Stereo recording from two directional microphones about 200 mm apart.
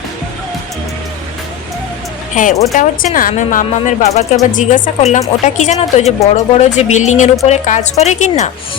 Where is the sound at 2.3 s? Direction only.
40° left (ahead or behind).